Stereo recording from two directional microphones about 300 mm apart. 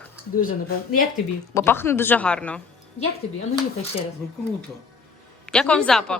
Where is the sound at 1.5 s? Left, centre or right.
Centre.